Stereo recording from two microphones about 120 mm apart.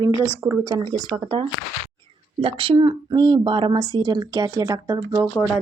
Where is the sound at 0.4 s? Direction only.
25° right (ahead or behind).